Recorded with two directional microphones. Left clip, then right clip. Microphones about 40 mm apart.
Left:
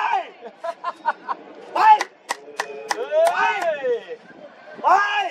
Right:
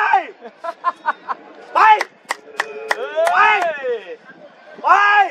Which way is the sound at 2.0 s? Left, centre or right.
Centre.